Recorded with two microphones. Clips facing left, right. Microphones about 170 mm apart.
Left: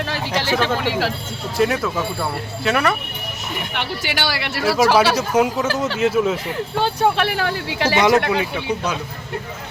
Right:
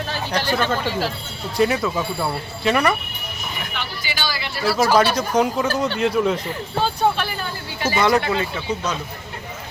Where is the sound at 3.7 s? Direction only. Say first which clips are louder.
Left 5 dB; 65° left (ahead or behind).